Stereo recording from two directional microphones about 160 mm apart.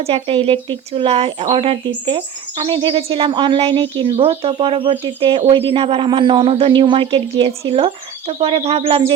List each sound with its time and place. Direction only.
0.0 s speech: 35° right (ahead or behind)